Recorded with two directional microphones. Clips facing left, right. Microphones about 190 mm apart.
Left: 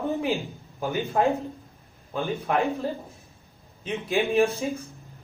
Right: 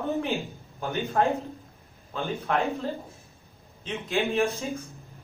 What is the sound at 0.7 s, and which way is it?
A man's voice, 15° left (ahead or behind).